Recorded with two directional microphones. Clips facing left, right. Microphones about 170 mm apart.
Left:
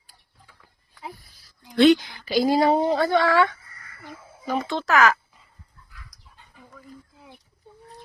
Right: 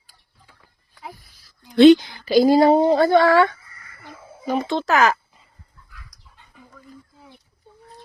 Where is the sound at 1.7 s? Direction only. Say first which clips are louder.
Right 6 dB; 25° right (ahead or behind).